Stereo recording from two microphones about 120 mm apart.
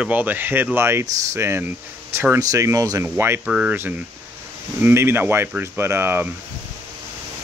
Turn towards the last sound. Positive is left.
turn(degrees=-20)  # may be behind; listen again after turning